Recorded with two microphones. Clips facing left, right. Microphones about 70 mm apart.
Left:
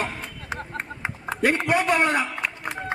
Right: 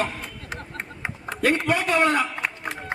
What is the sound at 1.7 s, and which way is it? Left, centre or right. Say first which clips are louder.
Speech: even; left.